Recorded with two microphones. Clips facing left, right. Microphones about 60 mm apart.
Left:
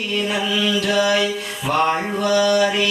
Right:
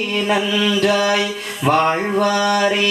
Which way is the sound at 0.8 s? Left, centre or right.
Right.